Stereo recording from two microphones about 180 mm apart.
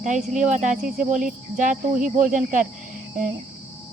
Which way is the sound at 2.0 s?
45° right (ahead or behind).